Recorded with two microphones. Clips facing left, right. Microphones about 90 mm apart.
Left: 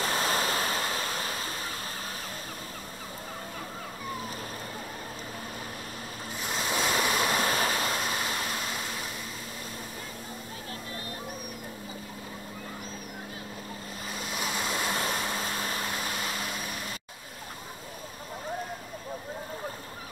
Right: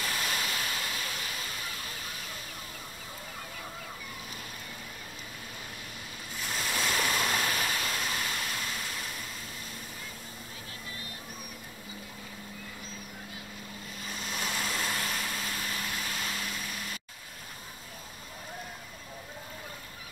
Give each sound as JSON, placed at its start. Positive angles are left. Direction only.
{"t": 0.0, "sound": "vehicle", "side_deg": 35}
{"t": 6.4, "sound": "waves", "side_deg": 25}
{"t": 14.3, "sound": "vehicle", "side_deg": 20}